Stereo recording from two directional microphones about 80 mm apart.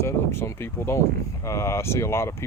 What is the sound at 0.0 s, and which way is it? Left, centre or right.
Speech, left.